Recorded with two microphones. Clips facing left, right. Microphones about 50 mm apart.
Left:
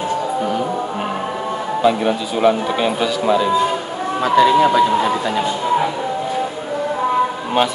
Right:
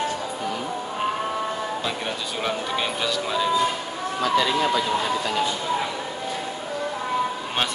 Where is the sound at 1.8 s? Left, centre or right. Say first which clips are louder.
Left 12 dB; centre.